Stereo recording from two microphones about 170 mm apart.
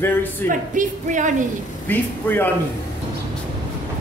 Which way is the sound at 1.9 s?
10° left (ahead or behind).